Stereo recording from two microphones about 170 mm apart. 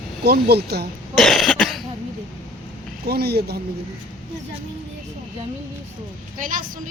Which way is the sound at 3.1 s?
70° right (ahead or behind).